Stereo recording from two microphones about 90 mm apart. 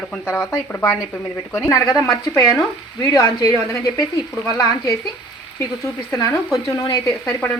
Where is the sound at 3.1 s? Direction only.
40° left (ahead or behind).